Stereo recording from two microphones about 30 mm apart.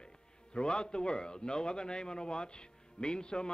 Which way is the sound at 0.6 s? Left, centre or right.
Left.